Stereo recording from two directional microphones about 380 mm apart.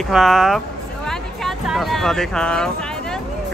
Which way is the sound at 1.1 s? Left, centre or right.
Centre.